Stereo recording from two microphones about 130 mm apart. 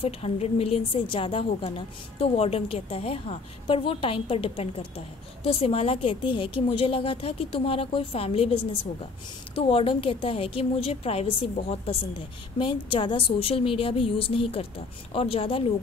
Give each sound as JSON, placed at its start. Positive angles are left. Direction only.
{"t": 0.0, "sound": "a woman's voice", "side_deg": 50}